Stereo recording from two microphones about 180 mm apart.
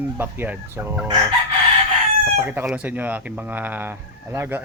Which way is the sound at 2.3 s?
10° right (ahead or behind).